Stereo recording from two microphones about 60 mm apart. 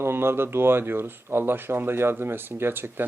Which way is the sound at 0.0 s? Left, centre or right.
Right.